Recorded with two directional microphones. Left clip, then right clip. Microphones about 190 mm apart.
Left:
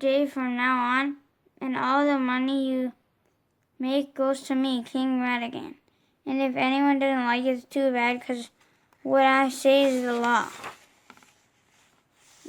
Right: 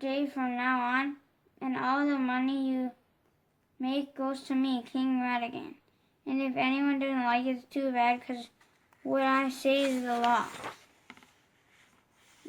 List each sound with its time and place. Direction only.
0.0 s a woman's voice: 45° left (ahead or behind)